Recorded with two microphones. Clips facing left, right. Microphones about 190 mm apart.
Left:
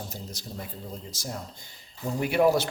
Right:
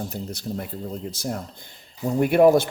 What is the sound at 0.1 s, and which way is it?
Speech, 60° right (ahead or behind).